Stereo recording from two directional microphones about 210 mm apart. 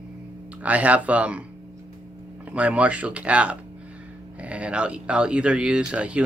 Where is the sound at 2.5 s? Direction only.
5° right (ahead or behind).